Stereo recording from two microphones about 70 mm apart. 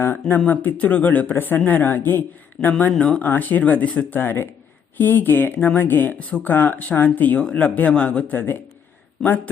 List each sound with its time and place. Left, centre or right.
0.0 s speech: left
2.9 s speech: centre
3.2 s speech: left